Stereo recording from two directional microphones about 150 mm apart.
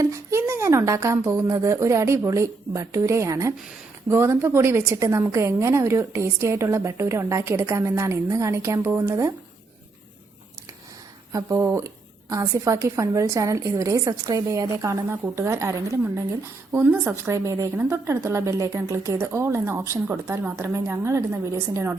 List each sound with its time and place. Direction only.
0.0 s a woman's voice: 20° right (ahead or behind)
11.3 s a woman's voice: 20° right (ahead or behind)